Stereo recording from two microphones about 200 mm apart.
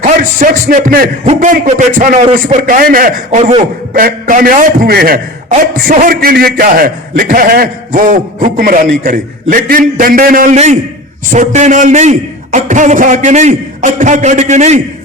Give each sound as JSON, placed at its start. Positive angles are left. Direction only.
{"t": 0.0, "sound": "a man's voice", "side_deg": -40}